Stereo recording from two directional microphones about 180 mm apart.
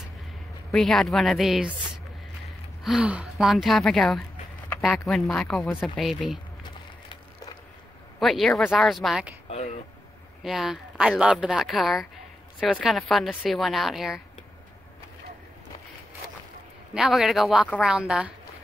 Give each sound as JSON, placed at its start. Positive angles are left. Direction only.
{"t": 0.7, "sound": "speech", "side_deg": 5}
{"t": 2.8, "sound": "speech", "side_deg": -5}
{"t": 8.2, "sound": "speech", "side_deg": 0}
{"t": 9.5, "sound": "a sound", "side_deg": 40}
{"t": 10.4, "sound": "speech", "side_deg": 0}
{"t": 16.9, "sound": "speech", "side_deg": 0}